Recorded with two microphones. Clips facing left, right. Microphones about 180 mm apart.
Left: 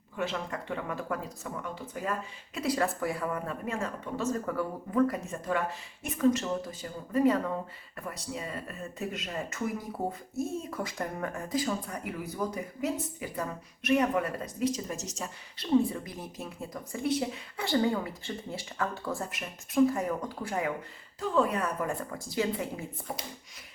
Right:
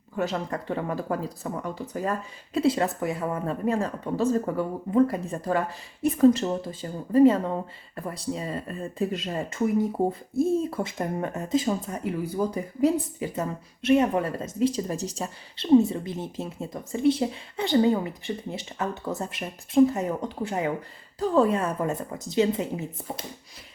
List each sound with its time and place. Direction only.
0.2 s speech: 40° right (ahead or behind); by 22.9 s 20° right (ahead or behind)